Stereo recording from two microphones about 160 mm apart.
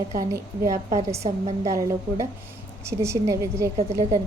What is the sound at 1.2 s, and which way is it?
Speech, 40° right (ahead or behind).